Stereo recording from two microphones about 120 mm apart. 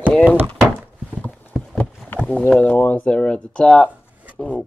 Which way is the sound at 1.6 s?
5° left (ahead or behind).